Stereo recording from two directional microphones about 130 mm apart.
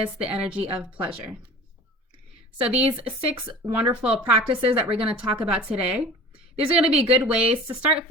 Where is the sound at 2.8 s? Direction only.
45° right (ahead or behind).